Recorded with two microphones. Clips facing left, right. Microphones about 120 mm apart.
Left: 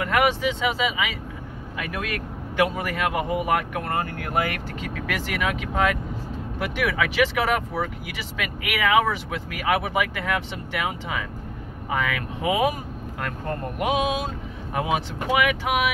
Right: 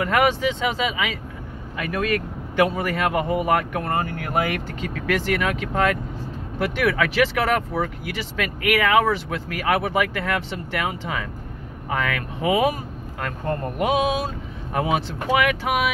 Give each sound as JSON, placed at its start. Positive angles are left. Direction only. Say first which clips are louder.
{"t": 0.0, "sound": "speech", "louder": "right 2 dB", "side_deg": 5}
{"t": 14.7, "sound": "speech", "louder": "right 2 dB", "side_deg": 10}